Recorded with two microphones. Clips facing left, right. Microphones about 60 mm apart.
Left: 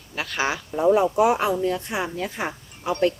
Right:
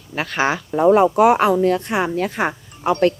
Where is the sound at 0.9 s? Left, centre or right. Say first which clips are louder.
Right 5 dB; right.